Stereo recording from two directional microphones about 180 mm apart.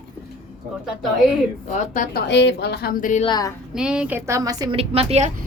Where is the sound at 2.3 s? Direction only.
80° left; by 3.2 s 45° left (ahead or behind).